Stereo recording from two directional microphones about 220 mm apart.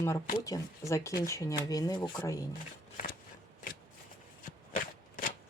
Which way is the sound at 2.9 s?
40° left (ahead or behind).